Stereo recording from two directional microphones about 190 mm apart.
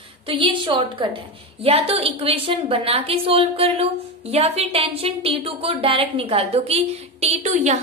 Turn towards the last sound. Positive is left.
turn(degrees=-40)  # may be behind; listen again after turning